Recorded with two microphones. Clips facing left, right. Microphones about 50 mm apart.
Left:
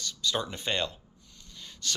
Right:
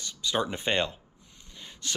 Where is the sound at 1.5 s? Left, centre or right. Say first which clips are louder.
Left 1 dB; right.